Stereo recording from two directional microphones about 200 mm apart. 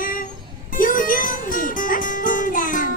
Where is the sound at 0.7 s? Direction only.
45° left (ahead or behind).